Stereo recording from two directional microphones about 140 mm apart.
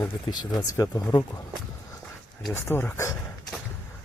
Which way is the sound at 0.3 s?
30° left (ahead or behind).